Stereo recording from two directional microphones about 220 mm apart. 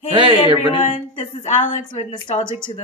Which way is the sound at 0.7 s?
30° left (ahead or behind).